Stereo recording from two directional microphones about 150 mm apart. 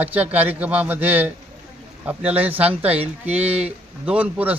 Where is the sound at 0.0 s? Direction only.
10° right (ahead or behind).